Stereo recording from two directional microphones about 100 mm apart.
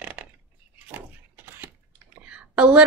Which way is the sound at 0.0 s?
15° right (ahead or behind).